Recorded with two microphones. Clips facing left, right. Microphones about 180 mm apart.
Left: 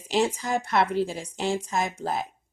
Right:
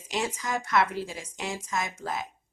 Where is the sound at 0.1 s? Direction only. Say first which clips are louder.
Left 6 dB; 30° left (ahead or behind).